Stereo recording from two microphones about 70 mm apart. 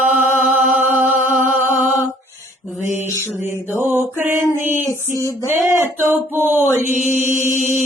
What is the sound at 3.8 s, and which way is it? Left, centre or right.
Music, right.